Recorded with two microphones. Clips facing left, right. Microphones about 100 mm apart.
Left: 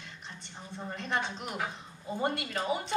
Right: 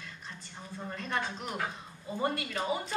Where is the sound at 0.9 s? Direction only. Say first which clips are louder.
Left 1 dB; 30° left (ahead or behind).